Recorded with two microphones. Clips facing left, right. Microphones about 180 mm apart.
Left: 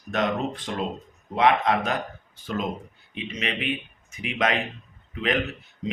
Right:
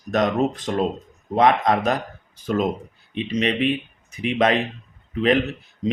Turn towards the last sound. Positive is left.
turn(degrees=-35)  # may be behind; listen again after turning